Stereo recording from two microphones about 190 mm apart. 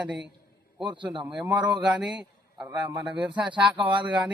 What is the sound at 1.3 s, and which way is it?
A man's voice, 5° right (ahead or behind).